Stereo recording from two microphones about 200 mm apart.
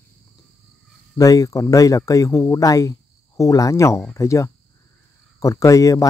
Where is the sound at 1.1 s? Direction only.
15° left (ahead or behind).